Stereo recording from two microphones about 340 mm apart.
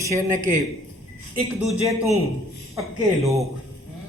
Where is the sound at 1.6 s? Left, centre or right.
Centre.